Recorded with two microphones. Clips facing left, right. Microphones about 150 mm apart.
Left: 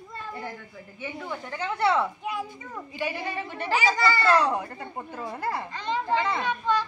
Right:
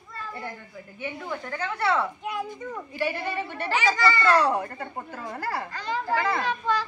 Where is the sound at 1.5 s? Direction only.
25° left (ahead or behind).